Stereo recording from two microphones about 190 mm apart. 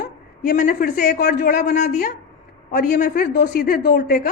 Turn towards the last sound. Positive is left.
turn(degrees=45)  # may be behind; listen again after turning